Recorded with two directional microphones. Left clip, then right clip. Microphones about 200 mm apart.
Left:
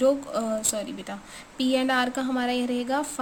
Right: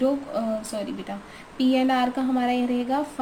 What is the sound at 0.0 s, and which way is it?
A woman's voice, 35° left (ahead or behind).